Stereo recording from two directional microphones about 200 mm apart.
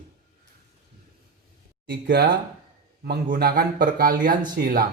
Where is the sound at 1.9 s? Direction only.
55° right (ahead or behind).